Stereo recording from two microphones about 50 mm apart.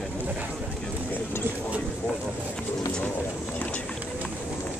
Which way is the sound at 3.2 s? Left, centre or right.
Left.